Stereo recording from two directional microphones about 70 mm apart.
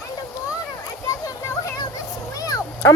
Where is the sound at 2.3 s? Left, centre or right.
Left.